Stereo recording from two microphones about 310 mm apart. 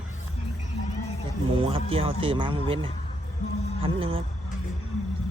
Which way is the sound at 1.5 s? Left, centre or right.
Centre.